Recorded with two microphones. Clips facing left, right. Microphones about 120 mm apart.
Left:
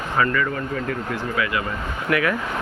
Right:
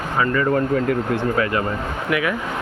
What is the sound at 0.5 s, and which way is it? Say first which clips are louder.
Speech: right 8 dB; 55° right (ahead or behind).